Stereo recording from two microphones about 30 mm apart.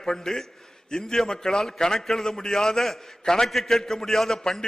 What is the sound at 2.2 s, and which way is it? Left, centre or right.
A man's voice, left.